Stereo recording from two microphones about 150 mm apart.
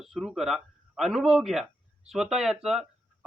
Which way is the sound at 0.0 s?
Centre (ahead or behind).